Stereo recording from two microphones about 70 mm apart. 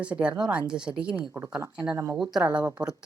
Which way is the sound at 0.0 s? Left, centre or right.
Centre.